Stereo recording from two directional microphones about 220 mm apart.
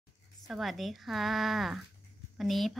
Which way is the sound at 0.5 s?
Centre (ahead or behind).